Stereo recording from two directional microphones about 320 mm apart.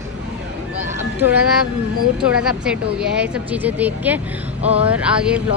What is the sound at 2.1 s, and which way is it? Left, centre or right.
Speech, centre.